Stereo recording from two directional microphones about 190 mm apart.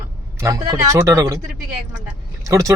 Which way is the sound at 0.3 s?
15° right (ahead or behind).